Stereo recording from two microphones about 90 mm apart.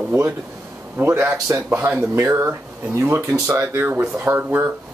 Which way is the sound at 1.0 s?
25° right (ahead or behind).